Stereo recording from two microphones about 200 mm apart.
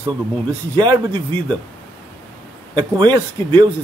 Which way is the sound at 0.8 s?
25° right (ahead or behind).